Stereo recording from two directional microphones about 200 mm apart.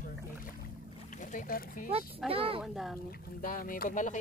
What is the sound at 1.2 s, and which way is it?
Speech, 40° left (ahead or behind).